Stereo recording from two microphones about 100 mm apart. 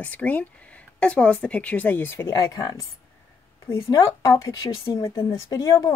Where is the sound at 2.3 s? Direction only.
40° left (ahead or behind).